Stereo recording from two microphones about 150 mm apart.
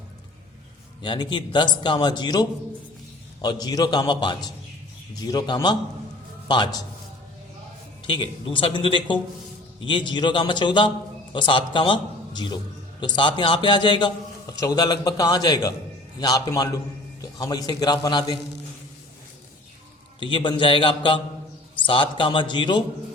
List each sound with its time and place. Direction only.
1.0 s a man's voice: 30° left (ahead or behind)
8.0 s a man's voice: 35° left (ahead or behind)
20.1 s a man's voice: 30° left (ahead or behind)